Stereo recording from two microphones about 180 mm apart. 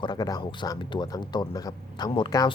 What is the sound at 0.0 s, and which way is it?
Speech, 25° left (ahead or behind).